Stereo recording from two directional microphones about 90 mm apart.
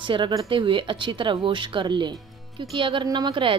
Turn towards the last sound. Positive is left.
turn(degrees=-60)  # may be behind; listen again after turning